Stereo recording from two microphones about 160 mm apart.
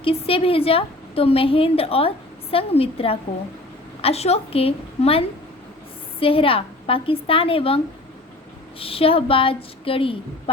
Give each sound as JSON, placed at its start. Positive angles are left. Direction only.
{"t": 0.0, "sound": "a woman's voice", "side_deg": 35}
{"t": 8.8, "sound": "a woman's voice", "side_deg": 35}